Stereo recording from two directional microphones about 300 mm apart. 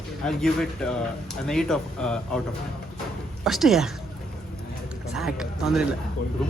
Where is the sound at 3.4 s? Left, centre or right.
Centre.